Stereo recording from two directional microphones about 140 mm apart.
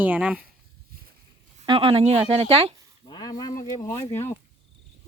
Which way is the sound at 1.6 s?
40° right (ahead or behind).